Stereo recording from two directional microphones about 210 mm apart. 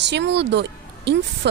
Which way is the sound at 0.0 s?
55° right (ahead or behind).